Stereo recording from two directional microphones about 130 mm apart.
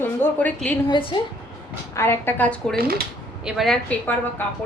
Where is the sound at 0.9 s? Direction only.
40° left (ahead or behind).